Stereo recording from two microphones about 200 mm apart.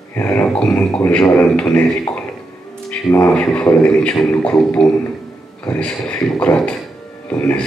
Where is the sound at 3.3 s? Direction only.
5° left (ahead or behind).